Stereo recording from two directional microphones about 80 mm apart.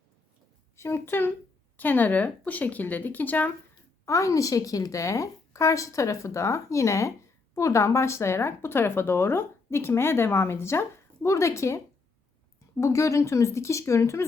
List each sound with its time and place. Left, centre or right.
0.8 s speech: left
4.0 s speech: left
12.8 s speech: left